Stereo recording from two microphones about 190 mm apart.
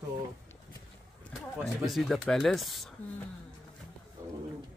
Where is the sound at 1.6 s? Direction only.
Centre (ahead or behind).